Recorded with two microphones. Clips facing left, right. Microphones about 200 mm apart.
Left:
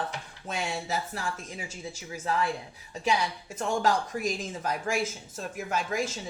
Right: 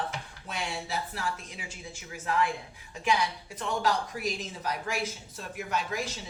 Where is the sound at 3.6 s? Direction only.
45° left (ahead or behind).